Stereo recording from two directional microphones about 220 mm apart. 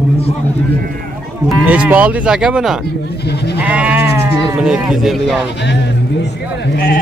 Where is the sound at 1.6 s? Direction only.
5° right (ahead or behind).